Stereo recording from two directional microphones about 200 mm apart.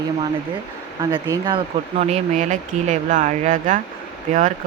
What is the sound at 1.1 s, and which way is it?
Speech, 20° right (ahead or behind).